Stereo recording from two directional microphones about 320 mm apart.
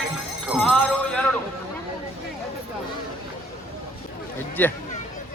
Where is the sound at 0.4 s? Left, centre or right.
Centre.